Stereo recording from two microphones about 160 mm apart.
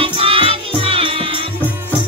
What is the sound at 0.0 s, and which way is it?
Music, 35° right (ahead or behind).